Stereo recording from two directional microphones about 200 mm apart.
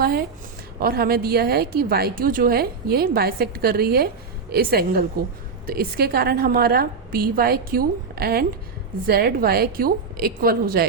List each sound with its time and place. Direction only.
0.8 s a woman's voice: 50° right (ahead or behind)